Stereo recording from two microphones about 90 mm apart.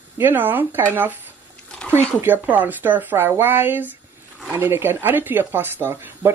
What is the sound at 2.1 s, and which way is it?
Speech, 20° right (ahead or behind).